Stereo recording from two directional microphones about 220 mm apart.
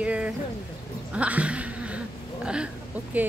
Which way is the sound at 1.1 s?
5° right (ahead or behind).